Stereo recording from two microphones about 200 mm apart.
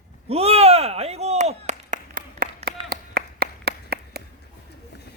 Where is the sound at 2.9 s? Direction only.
55° right (ahead or behind).